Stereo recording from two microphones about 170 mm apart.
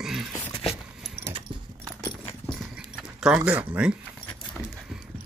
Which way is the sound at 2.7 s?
5° right (ahead or behind).